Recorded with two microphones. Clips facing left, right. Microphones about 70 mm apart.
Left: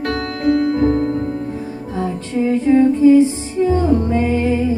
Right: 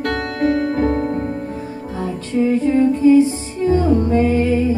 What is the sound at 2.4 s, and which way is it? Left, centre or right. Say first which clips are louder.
Music: left 2 dB; left.